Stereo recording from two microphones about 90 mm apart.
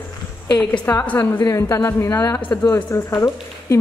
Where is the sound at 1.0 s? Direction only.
20° left (ahead or behind).